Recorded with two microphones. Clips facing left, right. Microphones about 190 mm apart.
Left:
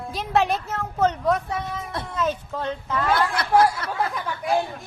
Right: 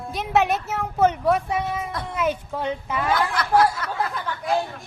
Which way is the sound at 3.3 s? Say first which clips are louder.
Even; 30° left (ahead or behind).